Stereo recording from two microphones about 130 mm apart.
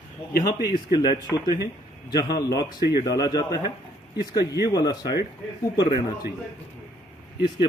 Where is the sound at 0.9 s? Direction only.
30° left (ahead or behind).